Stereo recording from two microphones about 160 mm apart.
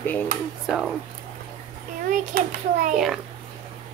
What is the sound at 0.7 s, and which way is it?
Speech, centre (ahead or behind).